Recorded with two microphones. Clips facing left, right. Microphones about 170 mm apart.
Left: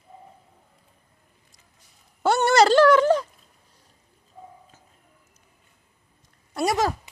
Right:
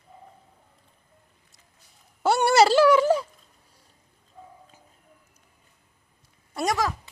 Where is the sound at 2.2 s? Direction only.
5° right (ahead or behind).